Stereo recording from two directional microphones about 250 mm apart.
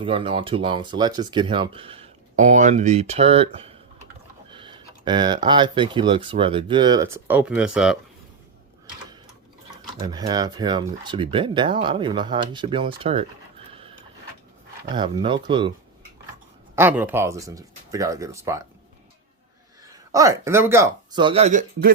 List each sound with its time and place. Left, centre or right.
0.0 s speech: right; by 7.9 s centre
10.0 s speech: centre
14.9 s speech: centre
16.7 s speech: centre
19.9 s speech: centre; by 21.9 s right